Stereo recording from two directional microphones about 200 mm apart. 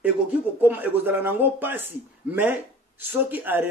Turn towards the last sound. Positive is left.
turn(degrees=-10)  # may be behind; listen again after turning